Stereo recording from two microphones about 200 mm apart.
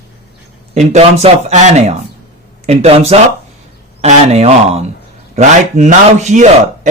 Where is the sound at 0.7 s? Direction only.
35° right (ahead or behind).